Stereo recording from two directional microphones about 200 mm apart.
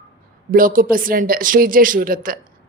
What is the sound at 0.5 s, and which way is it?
A woman's voice, 45° right (ahead or behind).